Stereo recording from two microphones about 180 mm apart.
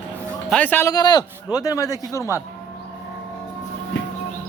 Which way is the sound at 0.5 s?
10° left (ahead or behind).